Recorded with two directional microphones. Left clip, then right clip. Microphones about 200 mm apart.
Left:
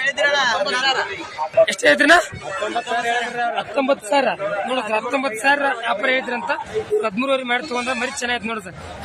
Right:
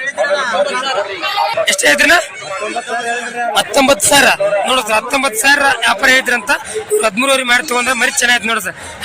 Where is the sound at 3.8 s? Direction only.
15° right (ahead or behind).